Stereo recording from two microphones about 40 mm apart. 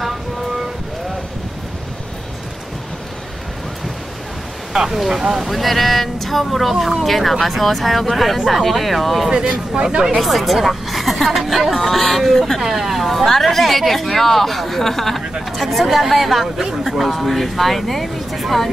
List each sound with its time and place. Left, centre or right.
4.7 s a woman's voice: centre
16.5 s a woman's voice: centre